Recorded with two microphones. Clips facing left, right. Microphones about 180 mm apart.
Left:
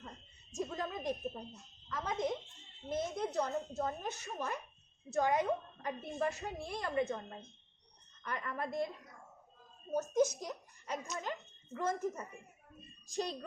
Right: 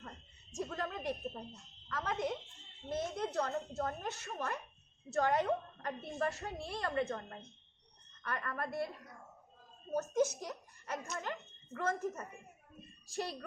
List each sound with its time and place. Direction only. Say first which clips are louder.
0.6 s a sound: left 1 dB; 15° left (ahead or behind)
1.5 s a woman's voice: even; 20° left (ahead or behind)
9.9 s speech: left 1 dB; 15° left (ahead or behind)